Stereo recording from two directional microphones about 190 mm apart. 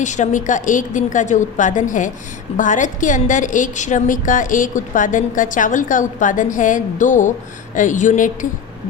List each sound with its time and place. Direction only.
0.0 s a woman's voice: 40° left (ahead or behind)